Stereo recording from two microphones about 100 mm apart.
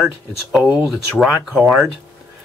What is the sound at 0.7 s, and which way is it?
Speech, 10° right (ahead or behind).